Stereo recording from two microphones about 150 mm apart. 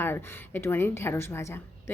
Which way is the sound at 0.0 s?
15° left (ahead or behind).